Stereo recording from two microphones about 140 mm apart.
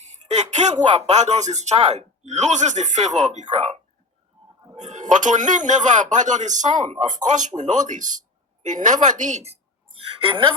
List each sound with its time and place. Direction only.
0.0 s a woman's voice: 55° right (ahead or behind); by 10.5 s 40° right (ahead or behind)